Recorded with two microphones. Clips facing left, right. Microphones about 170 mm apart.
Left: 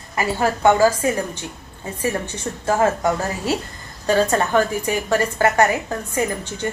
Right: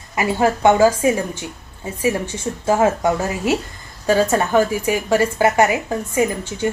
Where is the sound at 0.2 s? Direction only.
15° right (ahead or behind).